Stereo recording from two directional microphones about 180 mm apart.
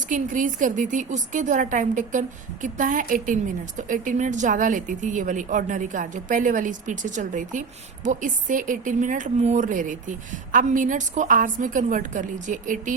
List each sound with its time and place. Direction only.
0.1 s a woman's voice: 45° right (ahead or behind)